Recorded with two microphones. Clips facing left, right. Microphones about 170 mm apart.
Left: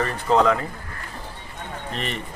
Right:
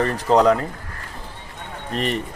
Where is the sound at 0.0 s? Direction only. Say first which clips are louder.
Right 3 dB; 35° right (ahead or behind).